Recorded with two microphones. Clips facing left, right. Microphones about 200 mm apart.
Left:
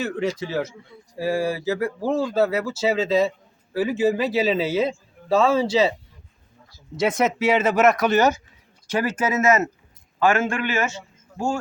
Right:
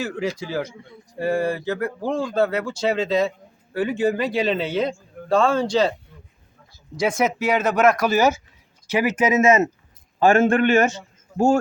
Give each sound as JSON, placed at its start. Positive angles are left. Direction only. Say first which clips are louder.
{"t": 0.0, "sound": "speech", "louder": "left 1 dB", "side_deg": 0}
{"t": 6.9, "sound": "speech", "louder": "even", "side_deg": 0}
{"t": 10.2, "sound": "a man's voice", "louder": "right 5 dB", "side_deg": -45}